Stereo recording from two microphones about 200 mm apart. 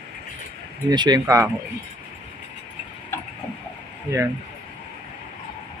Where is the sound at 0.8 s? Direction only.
20° right (ahead or behind).